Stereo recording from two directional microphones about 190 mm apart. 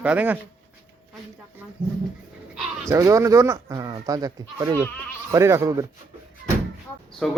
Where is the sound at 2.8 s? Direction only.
15° right (ahead or behind).